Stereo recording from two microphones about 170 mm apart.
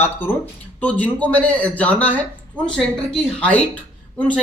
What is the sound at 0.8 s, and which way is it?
Speech, 10° left (ahead or behind).